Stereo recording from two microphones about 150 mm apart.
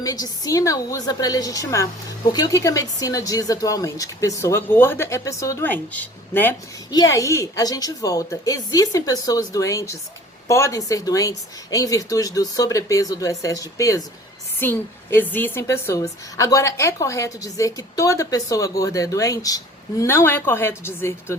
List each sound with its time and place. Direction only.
0.0 s a woman's voice: 25° left (ahead or behind)